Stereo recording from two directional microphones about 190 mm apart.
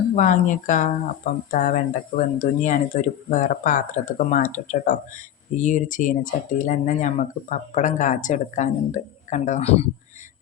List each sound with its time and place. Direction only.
0.2 s speech: 40° left (ahead or behind)